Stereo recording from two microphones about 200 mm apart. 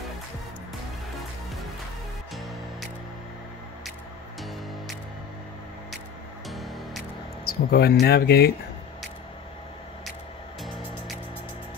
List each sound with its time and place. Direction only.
6.5 s music: centre (ahead or behind)
7.4 s speech: 55° left (ahead or behind)